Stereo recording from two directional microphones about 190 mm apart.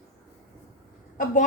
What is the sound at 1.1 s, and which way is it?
Speech, 40° left (ahead or behind).